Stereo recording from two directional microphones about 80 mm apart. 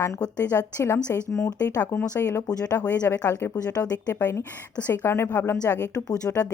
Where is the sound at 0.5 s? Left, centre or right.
Left.